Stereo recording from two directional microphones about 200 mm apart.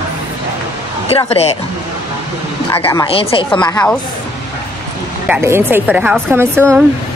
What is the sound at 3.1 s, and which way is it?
Speech, 30° left (ahead or behind).